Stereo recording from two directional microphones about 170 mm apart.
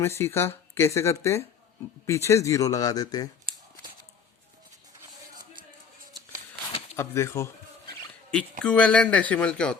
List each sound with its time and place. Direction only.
0.0 s speech: 15° left (ahead or behind)
6.9 s speech: 15° left (ahead or behind)
8.6 s speech: 5° left (ahead or behind)